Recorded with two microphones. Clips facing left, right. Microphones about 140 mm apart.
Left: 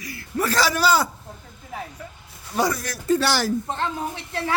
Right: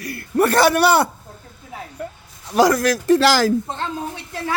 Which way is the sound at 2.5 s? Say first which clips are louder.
Right 9 dB; 90° right.